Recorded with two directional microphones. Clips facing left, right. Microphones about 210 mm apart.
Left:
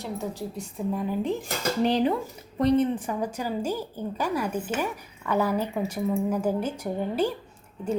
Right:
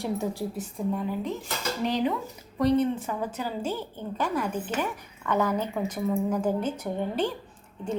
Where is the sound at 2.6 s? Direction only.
20° left (ahead or behind).